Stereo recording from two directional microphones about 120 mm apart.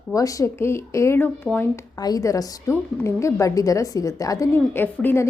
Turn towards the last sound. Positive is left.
turn(degrees=20)  # may be behind; listen again after turning